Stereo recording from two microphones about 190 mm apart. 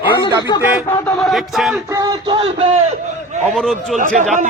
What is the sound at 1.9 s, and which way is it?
Speech, 20° right (ahead or behind).